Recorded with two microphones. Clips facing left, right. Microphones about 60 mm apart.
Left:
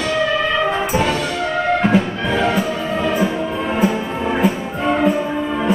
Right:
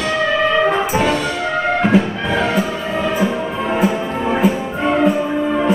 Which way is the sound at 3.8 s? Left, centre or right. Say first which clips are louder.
Even; centre.